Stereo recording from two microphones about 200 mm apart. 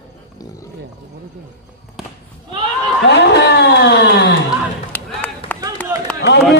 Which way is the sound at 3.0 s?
60° left (ahead or behind).